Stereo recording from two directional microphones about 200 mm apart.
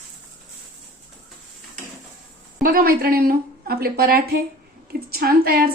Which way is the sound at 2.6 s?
45° right (ahead or behind).